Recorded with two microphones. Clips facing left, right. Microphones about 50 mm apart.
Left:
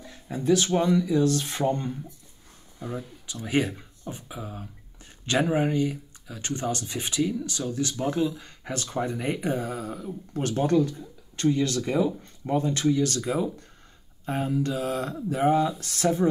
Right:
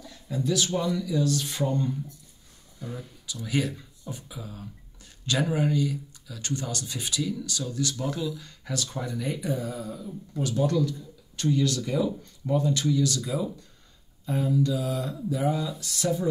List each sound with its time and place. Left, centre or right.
0.0 s speech: left